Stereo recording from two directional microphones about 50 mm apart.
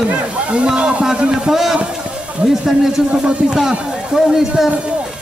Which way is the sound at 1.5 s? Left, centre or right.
Centre.